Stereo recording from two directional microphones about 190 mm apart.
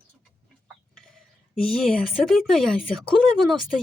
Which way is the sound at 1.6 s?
Centre (ahead or behind).